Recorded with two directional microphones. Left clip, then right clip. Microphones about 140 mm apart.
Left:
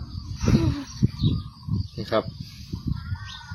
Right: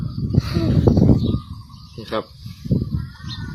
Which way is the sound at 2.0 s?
55° left (ahead or behind).